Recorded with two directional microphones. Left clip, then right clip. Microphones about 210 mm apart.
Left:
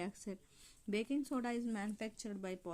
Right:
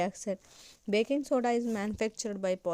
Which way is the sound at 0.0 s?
35° right (ahead or behind).